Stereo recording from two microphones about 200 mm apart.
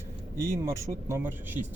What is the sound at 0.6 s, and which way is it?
Speech, 15° right (ahead or behind).